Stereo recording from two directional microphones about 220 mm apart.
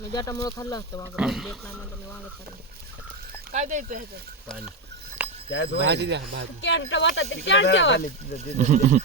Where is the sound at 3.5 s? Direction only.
35° right (ahead or behind).